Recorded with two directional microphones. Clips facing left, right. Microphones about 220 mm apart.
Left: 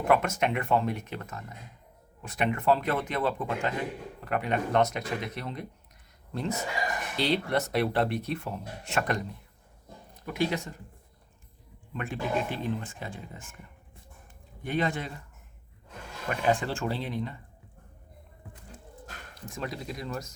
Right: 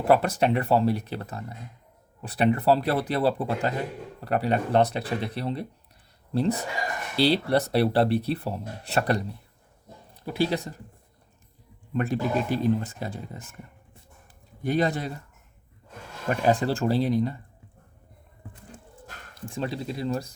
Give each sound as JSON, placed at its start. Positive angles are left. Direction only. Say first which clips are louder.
{"t": 0.1, "sound": "speech", "louder": "right 5 dB", "side_deg": -35}
{"t": 11.9, "sound": "speech", "louder": "right 5 dB", "side_deg": -40}
{"t": 14.6, "sound": "speech", "louder": "right 5 dB", "side_deg": -40}
{"t": 16.3, "sound": "speech", "louder": "right 4 dB", "side_deg": -40}
{"t": 19.5, "sound": "speech", "louder": "right 5 dB", "side_deg": -30}